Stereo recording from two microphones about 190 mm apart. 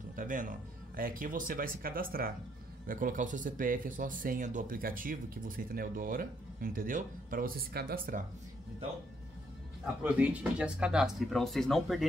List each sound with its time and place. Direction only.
0.1 s speech: 45° right (ahead or behind)
10.0 s speech: 5° right (ahead or behind)